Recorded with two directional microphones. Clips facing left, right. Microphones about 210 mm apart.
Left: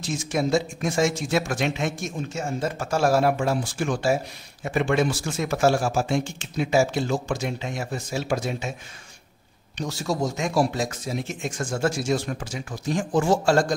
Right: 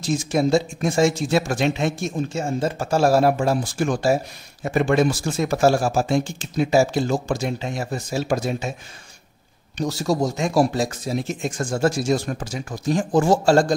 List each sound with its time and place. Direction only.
0.0 s speech: 35° right (ahead or behind)
9.8 s speech: 40° right (ahead or behind)